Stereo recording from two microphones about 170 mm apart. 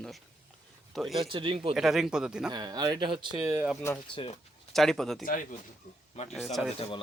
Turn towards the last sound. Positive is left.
turn(degrees=35)  # may be behind; listen again after turning